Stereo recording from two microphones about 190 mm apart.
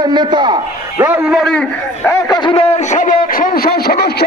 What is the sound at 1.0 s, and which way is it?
A man's voice, 5° right (ahead or behind).